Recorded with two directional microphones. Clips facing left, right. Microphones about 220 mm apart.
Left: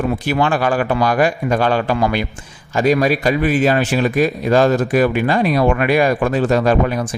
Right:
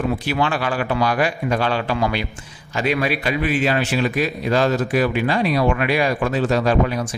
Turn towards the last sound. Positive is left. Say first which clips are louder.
# left 3 dB
turn(degrees=50)  # may be behind; listen again after turning